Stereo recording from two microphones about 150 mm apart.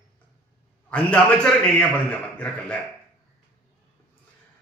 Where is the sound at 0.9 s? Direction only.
10° left (ahead or behind).